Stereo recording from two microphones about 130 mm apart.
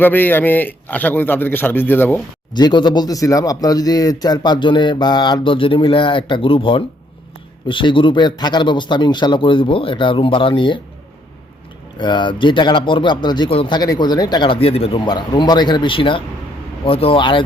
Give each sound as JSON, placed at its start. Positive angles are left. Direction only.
{"t": 0.0, "sound": "a man's voice", "side_deg": 15}
{"t": 2.5, "sound": "speech", "side_deg": 35}
{"t": 11.9, "sound": "speech", "side_deg": 35}
{"t": 13.7, "sound": "speech", "side_deg": 30}